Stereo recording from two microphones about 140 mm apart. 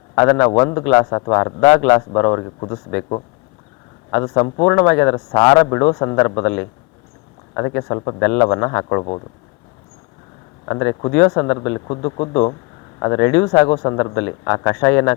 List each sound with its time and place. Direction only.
0.2 s speech: 15° left (ahead or behind)
1.0 s speech: 25° left (ahead or behind)
1.6 s speech: 10° left (ahead or behind)
2.0 s speech: 25° left (ahead or behind)
4.4 s speech: 30° left (ahead or behind)
4.7 s speech: 15° left (ahead or behind)
5.6 s speech: 25° left (ahead or behind)
8.2 s speech: 15° left (ahead or behind)
10.7 s speech: 25° left (ahead or behind)